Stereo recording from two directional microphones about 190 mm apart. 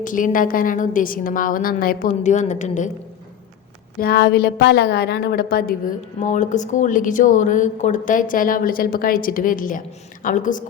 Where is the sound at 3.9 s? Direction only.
55° left (ahead or behind).